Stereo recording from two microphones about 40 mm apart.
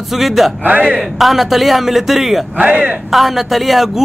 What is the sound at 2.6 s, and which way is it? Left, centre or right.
Speech, right.